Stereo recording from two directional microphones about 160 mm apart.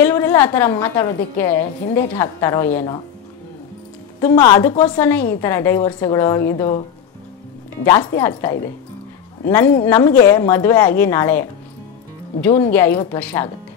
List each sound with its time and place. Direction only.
0.0 s a woman's voice: 15° left (ahead or behind)
4.4 s a woman's voice: 25° left (ahead or behind)
4.9 s a woman's voice: 10° left (ahead or behind)
7.8 s a woman's voice: 20° left (ahead or behind)